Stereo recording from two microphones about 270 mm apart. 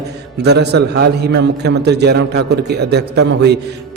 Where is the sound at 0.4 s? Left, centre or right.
Right.